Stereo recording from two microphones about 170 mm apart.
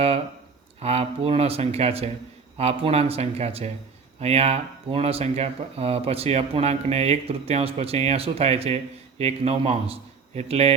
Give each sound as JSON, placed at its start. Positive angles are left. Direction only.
{"t": 0.8, "sound": "speech", "side_deg": -35}